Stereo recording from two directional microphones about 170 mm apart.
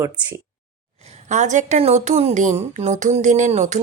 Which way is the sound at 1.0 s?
45° right (ahead or behind).